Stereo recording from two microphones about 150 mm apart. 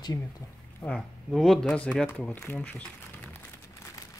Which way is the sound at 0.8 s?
5° left (ahead or behind).